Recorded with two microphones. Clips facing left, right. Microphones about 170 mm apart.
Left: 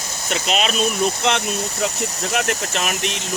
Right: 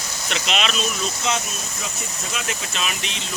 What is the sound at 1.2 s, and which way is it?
Speech, 70° left (ahead or behind).